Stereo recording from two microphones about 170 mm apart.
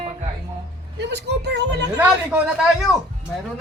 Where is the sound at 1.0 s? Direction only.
85° right.